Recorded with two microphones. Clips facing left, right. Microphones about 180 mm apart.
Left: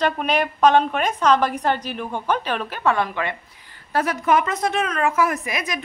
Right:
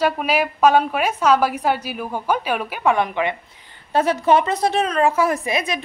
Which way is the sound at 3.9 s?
30° right (ahead or behind).